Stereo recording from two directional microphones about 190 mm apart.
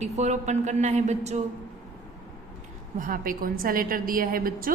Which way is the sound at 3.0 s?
50° right (ahead or behind).